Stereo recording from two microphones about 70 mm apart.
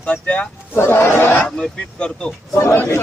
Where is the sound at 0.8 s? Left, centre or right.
Left.